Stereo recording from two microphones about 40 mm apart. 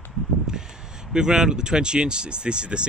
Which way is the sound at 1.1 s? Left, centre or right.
Centre.